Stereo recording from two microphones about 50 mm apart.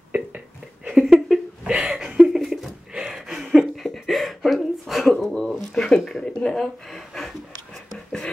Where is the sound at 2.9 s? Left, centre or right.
Centre.